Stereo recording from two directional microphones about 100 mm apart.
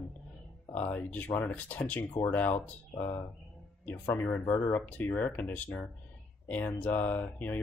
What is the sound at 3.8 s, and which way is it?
Speech, 20° left (ahead or behind).